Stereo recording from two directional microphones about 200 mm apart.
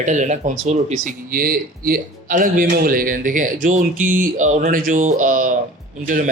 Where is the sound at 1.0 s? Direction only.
45° right (ahead or behind).